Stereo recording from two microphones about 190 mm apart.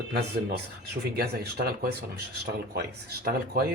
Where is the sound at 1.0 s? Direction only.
55° right (ahead or behind).